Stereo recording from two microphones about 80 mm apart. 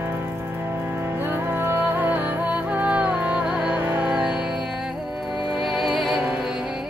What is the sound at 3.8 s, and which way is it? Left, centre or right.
Music, right.